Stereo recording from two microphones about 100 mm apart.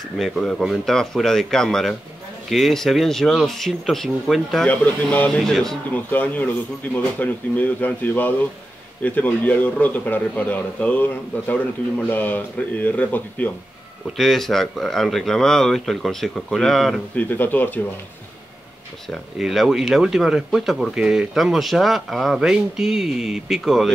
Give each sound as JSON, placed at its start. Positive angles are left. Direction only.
{"t": 0.2, "sound": "speech", "side_deg": 0}
{"t": 4.6, "sound": "a man's voice", "side_deg": 15}
{"t": 5.5, "sound": "speech", "side_deg": 5}
{"t": 6.0, "sound": "a man's voice", "side_deg": 15}
{"t": 14.1, "sound": "speech", "side_deg": 0}
{"t": 17.1, "sound": "a man's voice", "side_deg": 15}
{"t": 19.0, "sound": "speech", "side_deg": 0}